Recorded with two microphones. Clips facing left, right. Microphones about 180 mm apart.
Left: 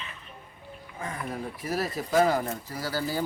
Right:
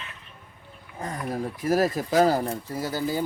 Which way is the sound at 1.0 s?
40° right (ahead or behind).